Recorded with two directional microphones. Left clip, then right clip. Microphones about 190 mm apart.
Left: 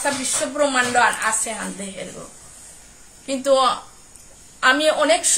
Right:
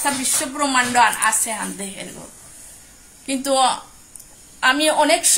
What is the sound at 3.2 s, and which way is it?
Speech, 10° left (ahead or behind).